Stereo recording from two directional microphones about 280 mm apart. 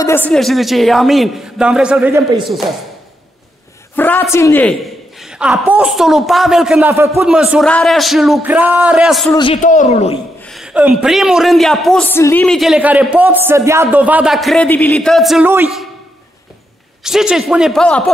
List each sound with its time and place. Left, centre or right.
0.0 s a man's voice: centre
3.9 s a man's voice: centre
5.2 s a sound: centre
5.7 s a man's voice: centre
9.3 s speech: centre
10.4 s a man's voice: centre
17.0 s a man's voice: centre